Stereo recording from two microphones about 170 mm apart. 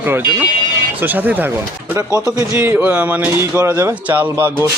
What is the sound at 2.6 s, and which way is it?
Speech, 10° right (ahead or behind).